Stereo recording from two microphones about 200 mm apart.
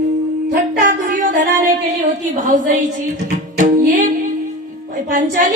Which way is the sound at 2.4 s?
40° right (ahead or behind).